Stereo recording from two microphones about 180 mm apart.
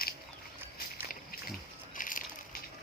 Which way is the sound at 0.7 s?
55° left (ahead or behind).